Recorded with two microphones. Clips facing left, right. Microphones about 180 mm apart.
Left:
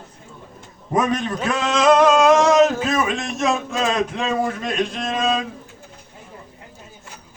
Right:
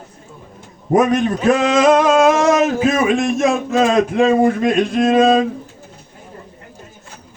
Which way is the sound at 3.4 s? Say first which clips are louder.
Right 6 dB; 55° right (ahead or behind).